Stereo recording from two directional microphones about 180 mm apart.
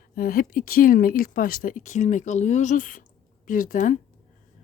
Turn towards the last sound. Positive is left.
turn(degrees=45)  # may be behind; listen again after turning